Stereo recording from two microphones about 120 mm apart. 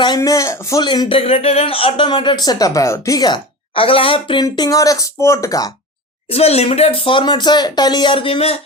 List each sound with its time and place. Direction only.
0.2 s a man's voice: 30° left (ahead or behind)
0.9 s speech: 45° left (ahead or behind)
6.3 s speech: 60° left (ahead or behind)